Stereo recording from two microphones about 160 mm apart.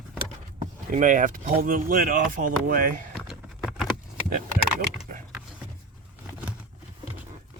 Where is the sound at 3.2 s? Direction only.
Centre (ahead or behind).